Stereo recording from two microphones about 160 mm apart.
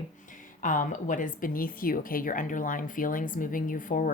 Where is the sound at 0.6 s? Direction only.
55° left (ahead or behind).